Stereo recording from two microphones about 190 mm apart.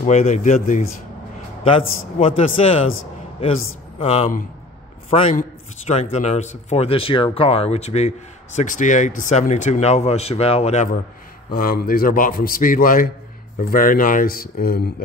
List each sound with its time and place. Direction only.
0.0 s a man's voice: 35° left (ahead or behind)
1.6 s a man's voice: 30° left (ahead or behind)
11.5 s a man's voice: 50° left (ahead or behind)